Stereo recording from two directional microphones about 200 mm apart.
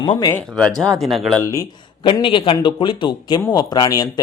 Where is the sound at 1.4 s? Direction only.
15° left (ahead or behind).